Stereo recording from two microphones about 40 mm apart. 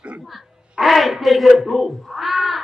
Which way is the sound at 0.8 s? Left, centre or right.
Centre.